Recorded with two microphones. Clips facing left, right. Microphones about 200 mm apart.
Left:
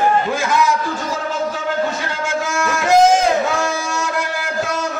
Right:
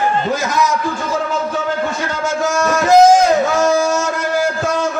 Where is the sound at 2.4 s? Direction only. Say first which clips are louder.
Right 6 dB; 40° right (ahead or behind).